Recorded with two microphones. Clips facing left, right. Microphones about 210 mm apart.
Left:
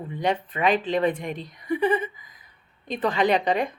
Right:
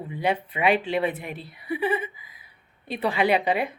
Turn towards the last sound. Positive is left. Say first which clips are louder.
# left 1 dB
turn(degrees=-10)  # may be behind; listen again after turning